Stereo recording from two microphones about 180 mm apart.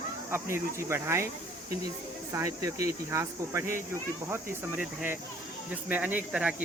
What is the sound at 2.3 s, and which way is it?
Speech, 15° right (ahead or behind).